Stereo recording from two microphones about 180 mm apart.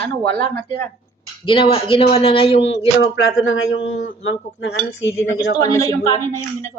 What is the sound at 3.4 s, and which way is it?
Speech, 90° left.